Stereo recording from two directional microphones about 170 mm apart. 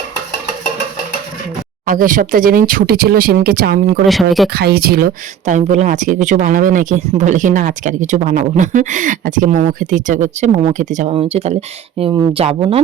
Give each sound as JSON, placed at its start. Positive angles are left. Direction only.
{"t": 1.9, "sound": "speech", "side_deg": -55}
{"t": 4.0, "sound": "speech", "side_deg": 0}
{"t": 4.4, "sound": "speech", "side_deg": -70}
{"t": 11.1, "sound": "speech", "side_deg": -35}